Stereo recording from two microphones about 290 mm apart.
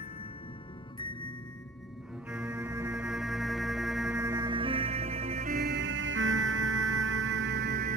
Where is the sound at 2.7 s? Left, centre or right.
Centre.